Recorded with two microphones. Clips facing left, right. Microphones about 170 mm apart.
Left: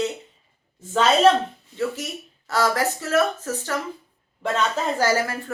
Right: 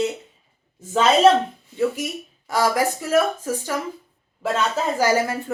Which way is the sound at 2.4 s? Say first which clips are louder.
Right 2 dB; 15° right (ahead or behind).